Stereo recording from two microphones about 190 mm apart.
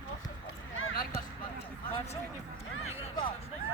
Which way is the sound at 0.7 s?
90° left.